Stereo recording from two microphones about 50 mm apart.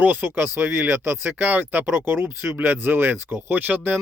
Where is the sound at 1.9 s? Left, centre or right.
Right.